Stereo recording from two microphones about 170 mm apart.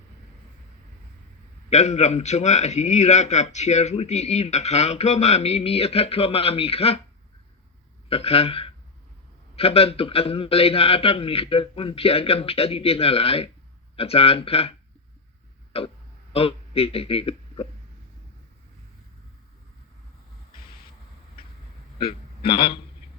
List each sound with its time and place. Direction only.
1.7 s a man's voice: 40° left (ahead or behind)
8.1 s a man's voice: 35° left (ahead or behind)
22.4 s a man's voice: 30° left (ahead or behind)